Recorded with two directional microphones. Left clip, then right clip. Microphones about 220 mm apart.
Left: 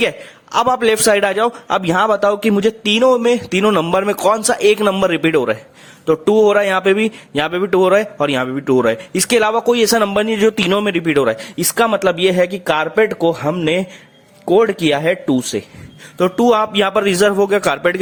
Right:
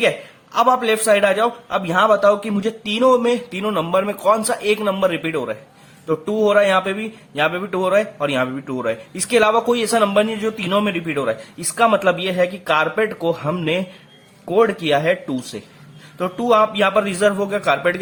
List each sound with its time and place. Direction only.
0.5 s speech: 50° left (ahead or behind)